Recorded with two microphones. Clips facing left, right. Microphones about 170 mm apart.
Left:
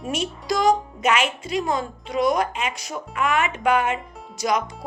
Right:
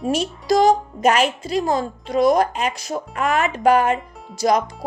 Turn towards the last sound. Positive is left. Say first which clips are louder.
# right 5 dB
turn(degrees=-35)  # may be behind; listen again after turning